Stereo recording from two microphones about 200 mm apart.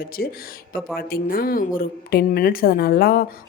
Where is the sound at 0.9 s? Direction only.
45° left (ahead or behind).